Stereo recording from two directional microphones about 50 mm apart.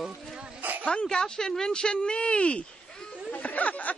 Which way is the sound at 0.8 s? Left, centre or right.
Centre.